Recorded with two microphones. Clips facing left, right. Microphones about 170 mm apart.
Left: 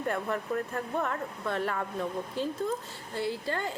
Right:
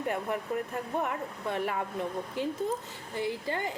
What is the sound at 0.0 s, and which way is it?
Speech, 15° right (ahead or behind).